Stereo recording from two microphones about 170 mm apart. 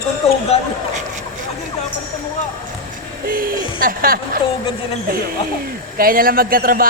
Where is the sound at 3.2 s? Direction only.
55° right (ahead or behind).